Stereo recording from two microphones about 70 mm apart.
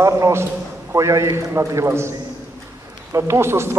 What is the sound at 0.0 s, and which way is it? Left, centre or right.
A man's voice, right.